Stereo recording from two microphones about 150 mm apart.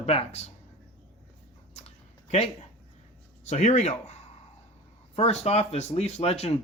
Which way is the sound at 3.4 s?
50° left (ahead or behind).